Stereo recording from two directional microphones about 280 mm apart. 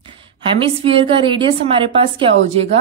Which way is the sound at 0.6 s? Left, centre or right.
Centre.